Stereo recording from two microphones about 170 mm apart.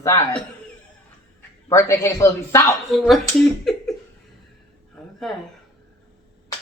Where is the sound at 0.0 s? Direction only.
15° left (ahead or behind).